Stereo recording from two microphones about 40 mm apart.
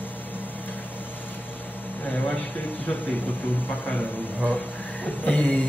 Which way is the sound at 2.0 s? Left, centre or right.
Left.